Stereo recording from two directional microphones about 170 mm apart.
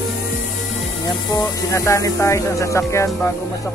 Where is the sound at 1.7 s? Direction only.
15° left (ahead or behind).